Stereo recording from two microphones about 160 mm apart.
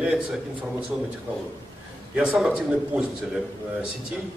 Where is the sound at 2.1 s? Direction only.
5° right (ahead or behind).